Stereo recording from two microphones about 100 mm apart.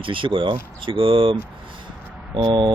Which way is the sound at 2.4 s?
55° right (ahead or behind).